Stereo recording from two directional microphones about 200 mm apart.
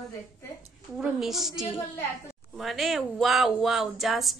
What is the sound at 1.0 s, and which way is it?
Speech, centre (ahead or behind).